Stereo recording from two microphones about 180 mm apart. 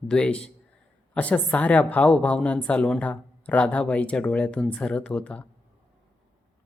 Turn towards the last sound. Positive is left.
turn(degrees=5)  # may be behind; listen again after turning